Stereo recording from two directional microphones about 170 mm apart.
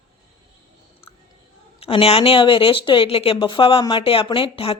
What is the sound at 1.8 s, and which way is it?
A woman's voice, 35° left (ahead or behind).